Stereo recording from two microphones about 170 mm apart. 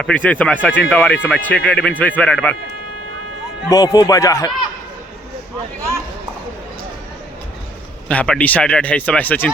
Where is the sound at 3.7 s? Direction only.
20° left (ahead or behind).